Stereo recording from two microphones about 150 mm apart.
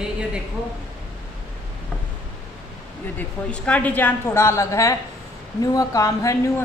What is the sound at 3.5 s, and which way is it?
A woman's voice, 10° left (ahead or behind).